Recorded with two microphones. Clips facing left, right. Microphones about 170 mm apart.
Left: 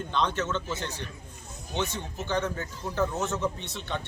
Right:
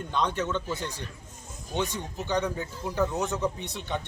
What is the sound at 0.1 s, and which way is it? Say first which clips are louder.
Speech: right 1 dB; 10° right (ahead or behind).